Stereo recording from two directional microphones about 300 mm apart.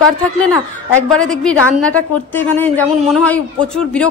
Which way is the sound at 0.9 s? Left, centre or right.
Centre.